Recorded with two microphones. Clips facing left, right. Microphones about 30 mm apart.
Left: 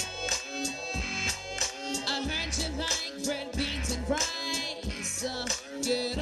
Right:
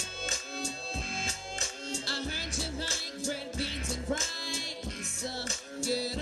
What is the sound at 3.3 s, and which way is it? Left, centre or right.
Music, centre.